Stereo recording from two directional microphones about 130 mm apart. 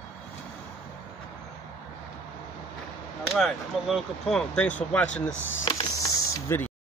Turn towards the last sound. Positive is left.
turn(degrees=25)  # may be behind; listen again after turning